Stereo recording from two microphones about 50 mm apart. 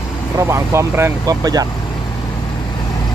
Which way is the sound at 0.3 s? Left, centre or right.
Right.